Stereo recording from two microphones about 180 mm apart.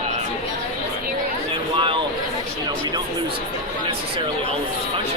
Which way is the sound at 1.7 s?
30° right (ahead or behind).